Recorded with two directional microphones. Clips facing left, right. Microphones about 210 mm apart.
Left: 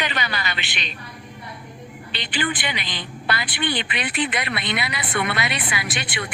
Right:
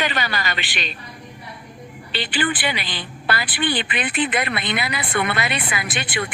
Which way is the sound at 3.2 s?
50° right (ahead or behind).